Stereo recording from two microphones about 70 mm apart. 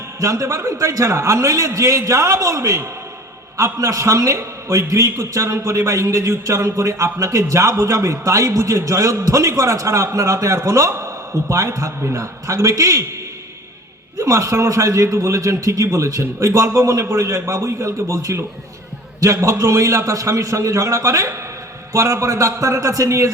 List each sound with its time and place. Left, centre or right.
0.2 s a man's voice: right
14.2 s a man's voice: right